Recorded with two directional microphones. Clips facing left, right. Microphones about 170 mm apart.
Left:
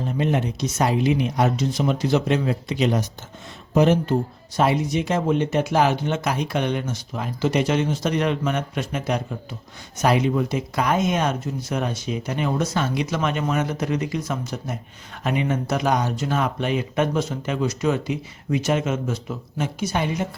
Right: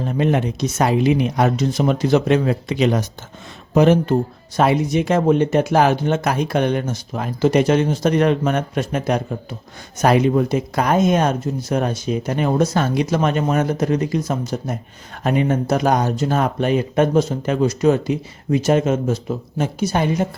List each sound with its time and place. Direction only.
0.2 s speech: 65° right (ahead or behind)
3.8 s speech: 60° right (ahead or behind); by 20.2 s 40° right (ahead or behind)